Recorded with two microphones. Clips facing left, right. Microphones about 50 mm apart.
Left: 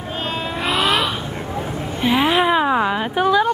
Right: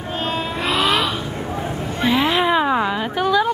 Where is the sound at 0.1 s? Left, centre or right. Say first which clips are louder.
Right 1 dB; centre.